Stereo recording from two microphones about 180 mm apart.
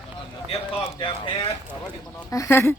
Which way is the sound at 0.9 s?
25° left (ahead or behind).